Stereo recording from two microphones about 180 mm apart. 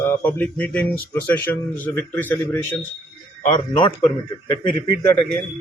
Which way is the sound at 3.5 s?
25° left (ahead or behind).